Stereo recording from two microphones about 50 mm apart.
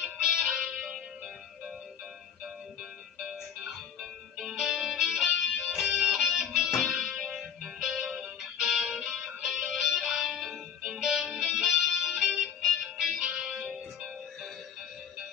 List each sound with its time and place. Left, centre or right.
0.0 s music: centre
3.2 s music: centre
5.8 s music: centre